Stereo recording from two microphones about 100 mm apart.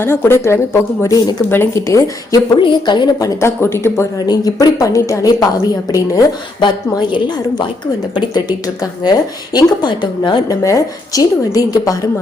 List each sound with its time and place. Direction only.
0.0 s a woman's voice: 25° left (ahead or behind)
2.6 s speech: 55° left (ahead or behind)
3.2 s speech: 25° left (ahead or behind)
4.3 s a woman's voice: 40° left (ahead or behind)
6.6 s speech: 50° left (ahead or behind)
10.6 s a woman's voice: 35° left (ahead or behind)